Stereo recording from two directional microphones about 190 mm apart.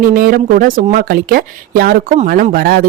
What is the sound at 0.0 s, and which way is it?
Speech, 45° right (ahead or behind).